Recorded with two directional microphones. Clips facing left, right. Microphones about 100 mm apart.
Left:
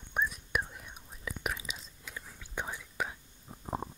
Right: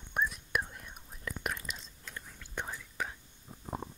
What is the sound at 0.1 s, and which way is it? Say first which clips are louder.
Whispering: even; centre (ahead or behind).